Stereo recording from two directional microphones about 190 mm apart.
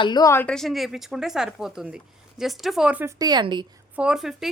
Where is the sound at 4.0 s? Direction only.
5° right (ahead or behind).